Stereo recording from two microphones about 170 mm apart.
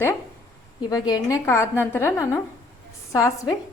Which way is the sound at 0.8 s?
25° left (ahead or behind).